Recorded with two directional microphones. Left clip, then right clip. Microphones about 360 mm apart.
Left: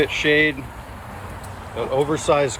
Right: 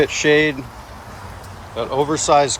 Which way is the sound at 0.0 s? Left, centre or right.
Centre.